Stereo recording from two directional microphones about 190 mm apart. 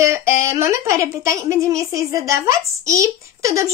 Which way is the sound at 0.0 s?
15° right (ahead or behind).